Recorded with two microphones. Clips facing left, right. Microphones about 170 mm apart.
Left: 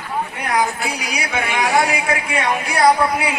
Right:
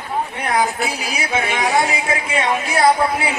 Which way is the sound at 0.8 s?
25° right (ahead or behind).